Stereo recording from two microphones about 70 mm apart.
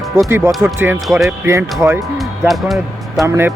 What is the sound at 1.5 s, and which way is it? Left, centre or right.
Speech, right.